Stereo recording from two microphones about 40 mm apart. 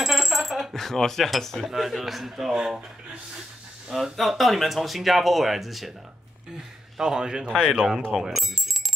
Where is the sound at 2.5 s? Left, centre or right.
Centre.